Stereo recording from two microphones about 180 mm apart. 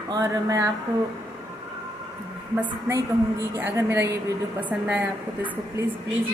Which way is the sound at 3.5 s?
10° right (ahead or behind).